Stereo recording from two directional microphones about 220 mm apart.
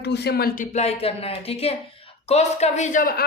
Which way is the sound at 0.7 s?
30° left (ahead or behind).